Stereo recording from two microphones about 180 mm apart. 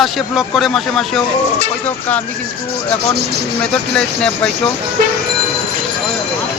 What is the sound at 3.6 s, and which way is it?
Speech, 5° left (ahead or behind).